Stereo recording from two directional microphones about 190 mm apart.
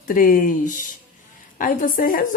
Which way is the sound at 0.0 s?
45° left (ahead or behind).